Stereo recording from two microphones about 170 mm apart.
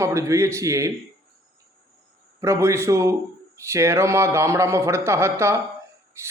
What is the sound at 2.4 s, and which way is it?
A man's voice, 15° right (ahead or behind).